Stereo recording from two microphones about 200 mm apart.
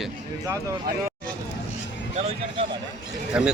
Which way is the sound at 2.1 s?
35° right (ahead or behind).